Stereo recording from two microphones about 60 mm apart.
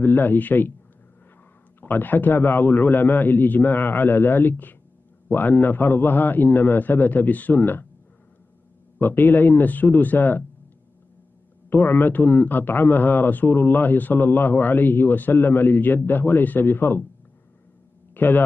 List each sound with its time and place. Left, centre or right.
0.0 s a man's voice: left
1.8 s a man's voice: left
8.9 s a man's voice: left
11.7 s a man's voice: left
18.1 s a sound: left